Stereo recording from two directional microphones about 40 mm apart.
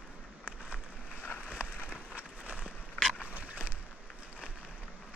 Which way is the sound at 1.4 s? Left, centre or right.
Right.